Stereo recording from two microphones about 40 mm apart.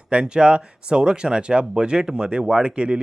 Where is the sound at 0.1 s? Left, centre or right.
Right.